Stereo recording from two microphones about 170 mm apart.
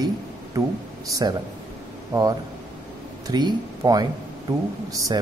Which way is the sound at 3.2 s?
25° right (ahead or behind).